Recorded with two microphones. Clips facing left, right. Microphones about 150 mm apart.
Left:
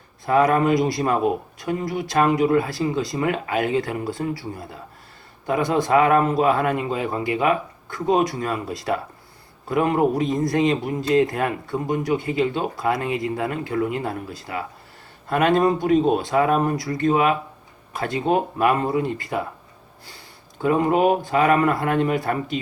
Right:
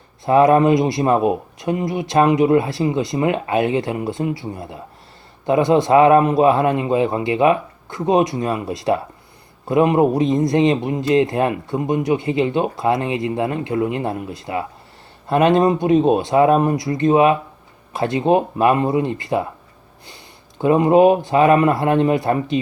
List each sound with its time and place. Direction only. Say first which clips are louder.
0.3 s speech: right 5 dB; 25° right (ahead or behind)